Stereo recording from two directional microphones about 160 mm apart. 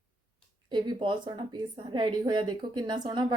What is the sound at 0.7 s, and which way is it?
A woman's voice, 30° right (ahead or behind).